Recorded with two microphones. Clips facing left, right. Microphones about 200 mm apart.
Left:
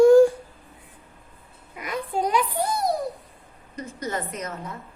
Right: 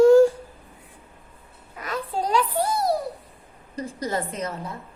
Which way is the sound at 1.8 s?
15° left (ahead or behind).